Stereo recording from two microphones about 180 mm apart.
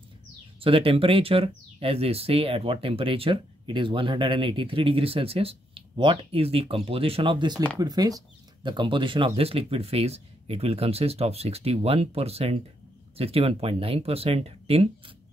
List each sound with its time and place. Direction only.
0.6 s speech: 30° right (ahead or behind)